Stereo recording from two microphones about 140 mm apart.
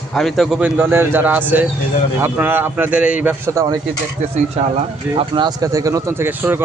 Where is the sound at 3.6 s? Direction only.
20° right (ahead or behind).